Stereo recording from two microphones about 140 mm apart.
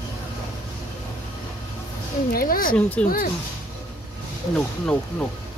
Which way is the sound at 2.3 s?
90° left.